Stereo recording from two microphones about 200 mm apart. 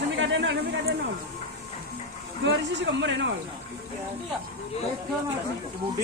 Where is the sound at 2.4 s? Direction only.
65° right (ahead or behind).